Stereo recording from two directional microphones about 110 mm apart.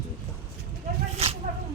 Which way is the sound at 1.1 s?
70° right (ahead or behind).